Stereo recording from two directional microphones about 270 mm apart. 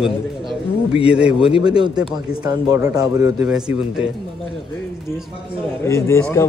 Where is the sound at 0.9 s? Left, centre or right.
Centre.